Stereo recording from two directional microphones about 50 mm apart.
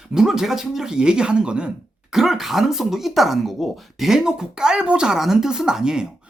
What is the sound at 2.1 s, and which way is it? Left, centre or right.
Speech, centre.